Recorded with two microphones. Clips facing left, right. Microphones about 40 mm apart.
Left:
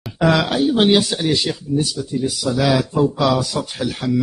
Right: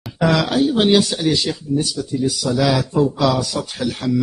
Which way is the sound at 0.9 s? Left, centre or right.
Centre.